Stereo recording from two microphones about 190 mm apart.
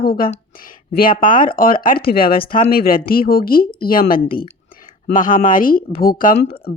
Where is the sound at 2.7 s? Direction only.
50° left (ahead or behind).